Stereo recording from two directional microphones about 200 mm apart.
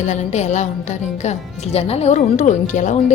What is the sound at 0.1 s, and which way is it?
A woman's voice, 35° left (ahead or behind).